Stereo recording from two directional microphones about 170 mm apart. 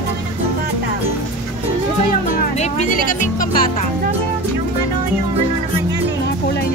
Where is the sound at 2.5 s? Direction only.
40° left (ahead or behind).